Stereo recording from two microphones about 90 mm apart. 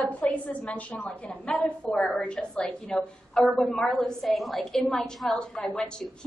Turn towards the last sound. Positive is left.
turn(degrees=10)  # may be behind; listen again after turning